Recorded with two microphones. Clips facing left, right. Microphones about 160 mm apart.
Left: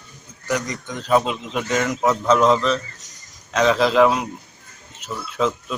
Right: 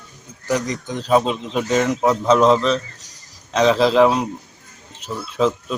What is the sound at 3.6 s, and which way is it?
Speech, centre (ahead or behind).